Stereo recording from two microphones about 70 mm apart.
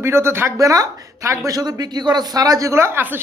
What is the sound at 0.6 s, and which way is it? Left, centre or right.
Speech, right.